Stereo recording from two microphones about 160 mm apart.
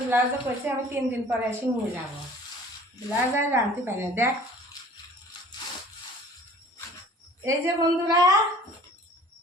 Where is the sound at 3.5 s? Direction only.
15° right (ahead or behind).